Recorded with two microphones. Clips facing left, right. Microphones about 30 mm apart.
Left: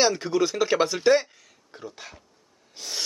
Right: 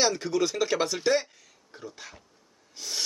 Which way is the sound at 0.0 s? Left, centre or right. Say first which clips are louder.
Left 3 dB; centre.